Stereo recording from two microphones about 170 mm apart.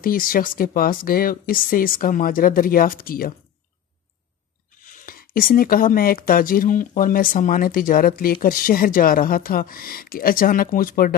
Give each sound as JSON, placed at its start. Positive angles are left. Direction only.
{"t": 0.0, "sound": "speech", "side_deg": 55}
{"t": 4.8, "sound": "speech", "side_deg": 55}